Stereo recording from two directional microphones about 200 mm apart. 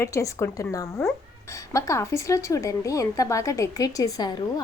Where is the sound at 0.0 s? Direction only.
15° left (ahead or behind).